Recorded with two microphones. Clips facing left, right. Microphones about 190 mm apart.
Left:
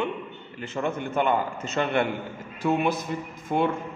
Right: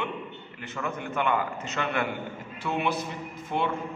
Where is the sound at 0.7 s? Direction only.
35° left (ahead or behind).